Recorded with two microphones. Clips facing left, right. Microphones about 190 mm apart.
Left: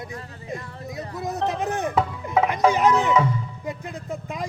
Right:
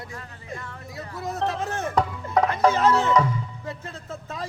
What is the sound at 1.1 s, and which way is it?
Speech, 20° left (ahead or behind).